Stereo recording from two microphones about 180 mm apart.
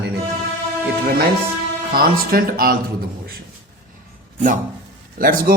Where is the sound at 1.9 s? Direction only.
55° right (ahead or behind).